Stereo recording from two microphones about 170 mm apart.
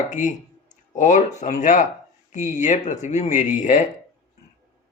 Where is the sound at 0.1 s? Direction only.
45° left (ahead or behind).